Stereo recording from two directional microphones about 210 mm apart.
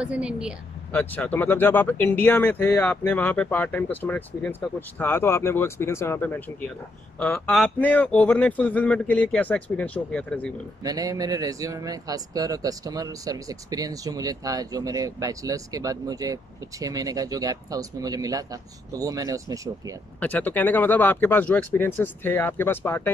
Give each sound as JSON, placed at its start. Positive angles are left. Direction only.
{"t": 0.0, "sound": "a woman's voice", "side_deg": -5}
{"t": 0.9, "sound": "speech", "side_deg": 10}
{"t": 10.8, "sound": "speech", "side_deg": -15}
{"t": 20.2, "sound": "speech", "side_deg": 10}